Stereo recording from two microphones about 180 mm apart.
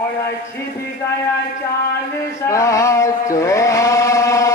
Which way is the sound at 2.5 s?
15° left (ahead or behind).